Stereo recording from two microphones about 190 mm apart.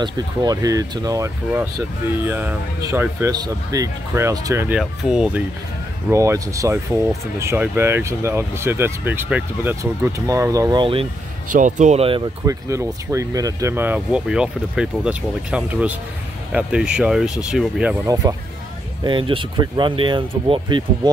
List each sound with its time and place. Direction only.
0.0 s speech: 20° right (ahead or behind); by 5.4 s 5° right (ahead or behind)
6.0 s speech: 15° right (ahead or behind)
11.5 s speech: 40° right (ahead or behind)
12.4 s speech: 15° right (ahead or behind)
18.0 s speech: 20° right (ahead or behind)